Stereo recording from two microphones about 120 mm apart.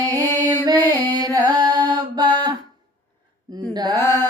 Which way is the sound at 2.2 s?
40° right (ahead or behind).